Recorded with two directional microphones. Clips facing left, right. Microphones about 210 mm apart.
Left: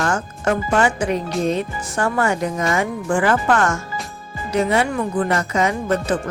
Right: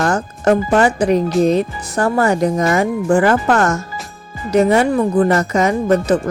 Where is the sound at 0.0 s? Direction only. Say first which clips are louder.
Right 5 dB; 35° right (ahead or behind).